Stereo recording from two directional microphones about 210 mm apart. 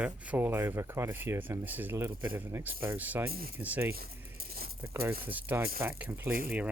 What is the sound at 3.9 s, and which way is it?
Coin, 45° right (ahead or behind).